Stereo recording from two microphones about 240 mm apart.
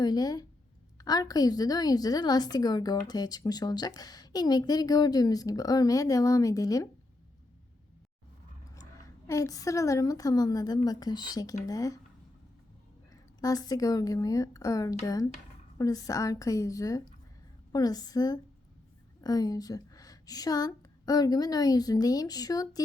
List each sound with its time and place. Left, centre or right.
0.0 s a woman's voice: centre
8.7 s a woman's voice: centre
13.4 s a woman's voice: centre